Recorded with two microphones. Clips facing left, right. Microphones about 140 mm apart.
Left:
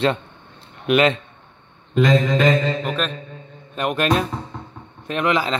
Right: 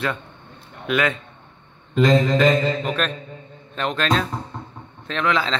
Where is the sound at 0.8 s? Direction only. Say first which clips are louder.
Left 5 dB; 20° left (ahead or behind).